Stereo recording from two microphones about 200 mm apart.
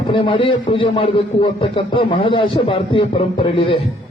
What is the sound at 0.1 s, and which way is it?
A man's voice, 25° left (ahead or behind).